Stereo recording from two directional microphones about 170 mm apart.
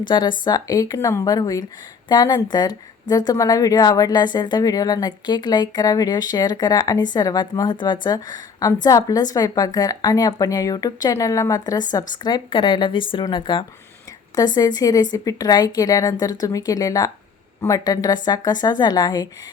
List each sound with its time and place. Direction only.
0.1 s a woman's voice: 25° left (ahead or behind)